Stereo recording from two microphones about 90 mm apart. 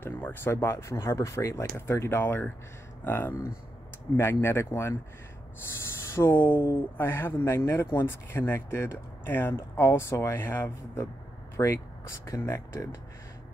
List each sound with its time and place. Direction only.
0.0 s speech: 25° left (ahead or behind)